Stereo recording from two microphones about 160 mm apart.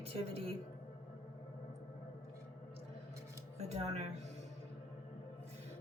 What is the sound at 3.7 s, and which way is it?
Speech, 40° right (ahead or behind).